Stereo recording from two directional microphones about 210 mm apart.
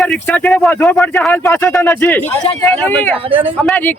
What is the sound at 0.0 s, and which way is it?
Speech, 5° left (ahead or behind).